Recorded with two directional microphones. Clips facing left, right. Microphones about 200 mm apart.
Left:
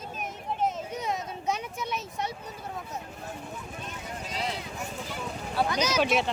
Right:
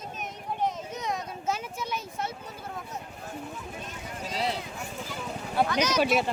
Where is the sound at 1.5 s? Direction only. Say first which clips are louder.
Even; centre (ahead or behind).